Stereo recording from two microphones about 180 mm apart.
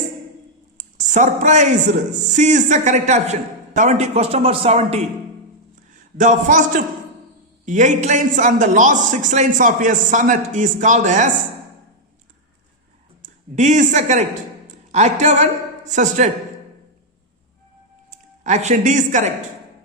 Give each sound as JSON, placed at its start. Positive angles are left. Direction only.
{"t": 0.8, "sound": "a man's voice", "side_deg": -45}
{"t": 13.2, "sound": "a man's voice", "side_deg": -40}
{"t": 18.1, "sound": "speech", "side_deg": -40}